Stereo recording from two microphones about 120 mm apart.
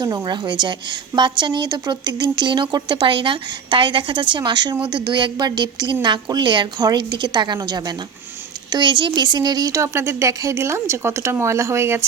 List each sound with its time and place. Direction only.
0.0 s a woman's voice: 35° right (ahead or behind)